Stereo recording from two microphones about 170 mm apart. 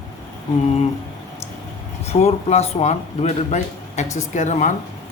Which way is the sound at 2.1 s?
40° left (ahead or behind).